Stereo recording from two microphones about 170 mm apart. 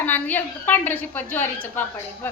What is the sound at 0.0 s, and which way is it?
A woman's voice, 10° left (ahead or behind).